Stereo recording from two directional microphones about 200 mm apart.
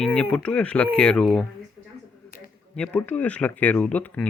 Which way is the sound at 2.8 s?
5° left (ahead or behind).